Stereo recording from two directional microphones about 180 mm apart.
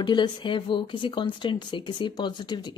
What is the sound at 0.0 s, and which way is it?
Speech, 25° left (ahead or behind).